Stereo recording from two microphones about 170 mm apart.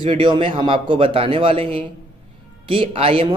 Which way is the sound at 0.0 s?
30° right (ahead or behind).